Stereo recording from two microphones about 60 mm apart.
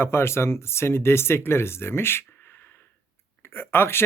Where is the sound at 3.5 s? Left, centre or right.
Left.